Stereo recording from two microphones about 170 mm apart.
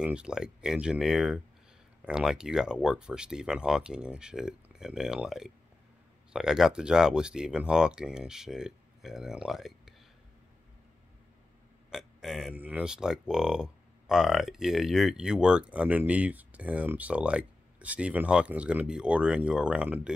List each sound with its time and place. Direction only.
0.0 s speech: 5° right (ahead or behind)
11.9 s speech: centre (ahead or behind)